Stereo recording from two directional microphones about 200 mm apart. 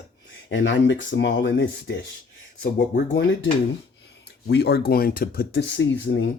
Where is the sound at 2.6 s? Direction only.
45° left (ahead or behind).